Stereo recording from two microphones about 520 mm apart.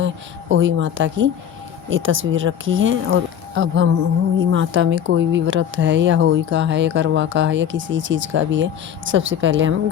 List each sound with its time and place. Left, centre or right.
0.0 s speech: right